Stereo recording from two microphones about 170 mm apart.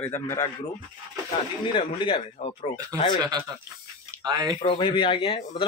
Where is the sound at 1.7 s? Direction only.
30° left (ahead or behind).